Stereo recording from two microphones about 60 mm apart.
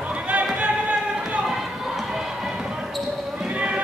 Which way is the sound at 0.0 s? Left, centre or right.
Right.